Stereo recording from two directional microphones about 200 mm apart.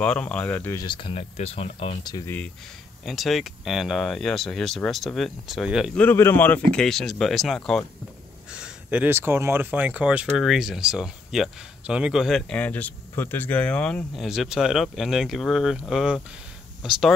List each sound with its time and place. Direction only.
0.0 s speech: 5° left (ahead or behind); by 2.1 s 30° left (ahead or behind)
2.1 s speech: 10° left (ahead or behind)
3.1 s speech: centre (ahead or behind)
5.9 s speech: 10° left (ahead or behind)